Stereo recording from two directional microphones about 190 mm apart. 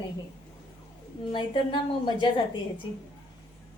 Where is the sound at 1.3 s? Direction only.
25° left (ahead or behind).